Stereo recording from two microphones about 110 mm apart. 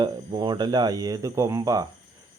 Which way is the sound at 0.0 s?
45° right (ahead or behind).